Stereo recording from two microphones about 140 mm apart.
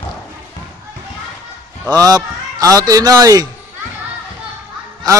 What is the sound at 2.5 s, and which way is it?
Speech, 25° right (ahead or behind).